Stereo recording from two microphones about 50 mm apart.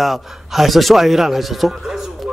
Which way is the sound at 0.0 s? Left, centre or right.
Centre.